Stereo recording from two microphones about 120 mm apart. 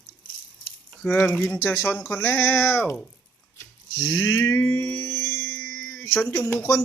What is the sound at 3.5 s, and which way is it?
Music, 25° left (ahead or behind).